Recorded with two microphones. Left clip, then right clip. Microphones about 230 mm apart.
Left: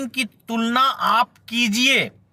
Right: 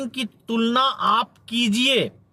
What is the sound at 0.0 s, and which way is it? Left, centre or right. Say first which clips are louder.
Speech: left 4 dB; centre.